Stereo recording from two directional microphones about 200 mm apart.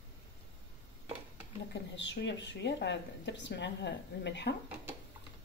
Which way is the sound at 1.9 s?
65° left (ahead or behind).